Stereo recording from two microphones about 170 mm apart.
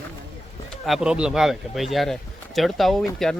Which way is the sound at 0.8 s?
5° right (ahead or behind).